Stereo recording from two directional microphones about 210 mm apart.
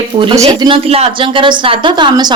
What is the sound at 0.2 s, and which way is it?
Speech, 25° right (ahead or behind).